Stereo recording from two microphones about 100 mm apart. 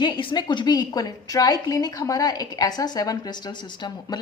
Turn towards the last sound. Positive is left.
turn(degrees=45)  # may be behind; listen again after turning